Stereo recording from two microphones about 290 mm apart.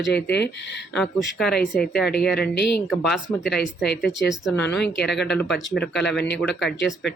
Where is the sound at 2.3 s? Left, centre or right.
Left.